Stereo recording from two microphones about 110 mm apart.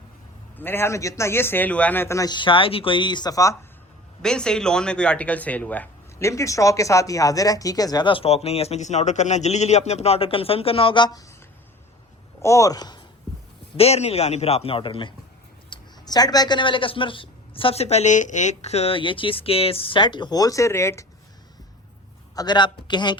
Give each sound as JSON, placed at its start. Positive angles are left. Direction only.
{"t": 0.5, "sound": "a man's voice", "side_deg": 20}
{"t": 2.1, "sound": "speech", "side_deg": 40}
{"t": 4.2, "sound": "speech", "side_deg": 5}
{"t": 6.2, "sound": "speech", "side_deg": 30}
{"t": 12.4, "sound": "speech", "side_deg": 25}
{"t": 13.7, "sound": "a man's voice", "side_deg": 70}
{"t": 15.7, "sound": "speech", "side_deg": 35}
{"t": 22.4, "sound": "speech", "side_deg": 45}